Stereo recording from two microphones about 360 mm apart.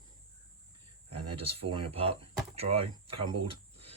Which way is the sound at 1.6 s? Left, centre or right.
Centre.